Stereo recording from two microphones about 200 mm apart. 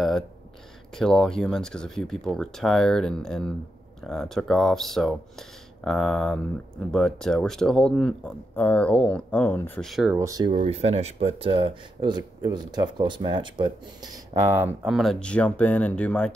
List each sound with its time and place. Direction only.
0.9 s speech: 5° left (ahead or behind)
10.1 s speech: 20° right (ahead or behind)
10.5 s speech: 30° right (ahead or behind); by 14.7 s 10° right (ahead or behind)
14.8 s speech: centre (ahead or behind)